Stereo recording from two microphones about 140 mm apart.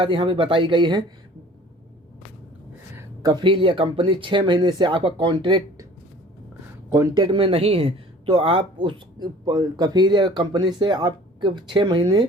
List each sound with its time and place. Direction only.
0.0 s speech: 35° right (ahead or behind)
3.2 s speech: 35° right (ahead or behind)
6.9 s speech: 25° right (ahead or behind)